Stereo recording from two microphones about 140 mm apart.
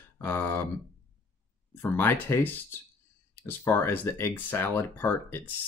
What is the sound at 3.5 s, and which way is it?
Speech, 15° left (ahead or behind).